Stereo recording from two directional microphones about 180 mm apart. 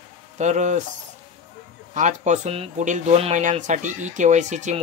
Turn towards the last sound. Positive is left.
turn(degrees=-40)  # may be behind; listen again after turning